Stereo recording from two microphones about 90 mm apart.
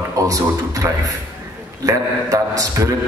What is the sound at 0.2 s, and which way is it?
A man's voice, 40° right (ahead or behind).